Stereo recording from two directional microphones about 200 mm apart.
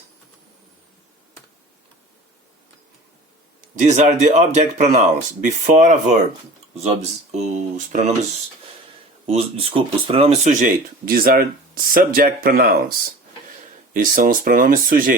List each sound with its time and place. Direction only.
3.8 s speech: 35° right (ahead or behind)
9.2 s speech: 30° right (ahead or behind)
11.0 s speech: 50° right (ahead or behind)